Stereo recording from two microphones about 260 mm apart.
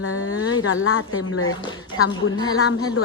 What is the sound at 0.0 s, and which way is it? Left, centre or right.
Speech, left.